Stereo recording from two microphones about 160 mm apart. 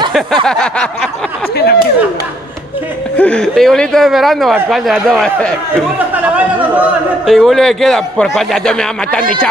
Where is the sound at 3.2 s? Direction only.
5° left (ahead or behind).